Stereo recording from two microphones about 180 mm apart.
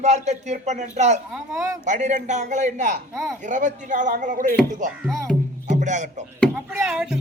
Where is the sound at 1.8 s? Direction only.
40° right (ahead or behind).